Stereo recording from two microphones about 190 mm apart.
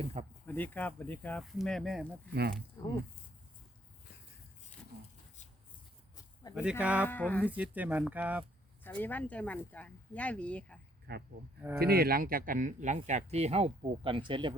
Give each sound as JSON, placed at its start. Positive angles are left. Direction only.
{"t": 0.0, "sound": "speech", "side_deg": -35}
{"t": 0.4, "sound": "speech", "side_deg": 10}
{"t": 6.5, "sound": "speech", "side_deg": -5}
{"t": 7.1, "sound": "speech", "side_deg": 10}
{"t": 7.4, "sound": "speech", "side_deg": -10}
{"t": 8.8, "sound": "speech", "side_deg": 10}
{"t": 11.1, "sound": "speech", "side_deg": -60}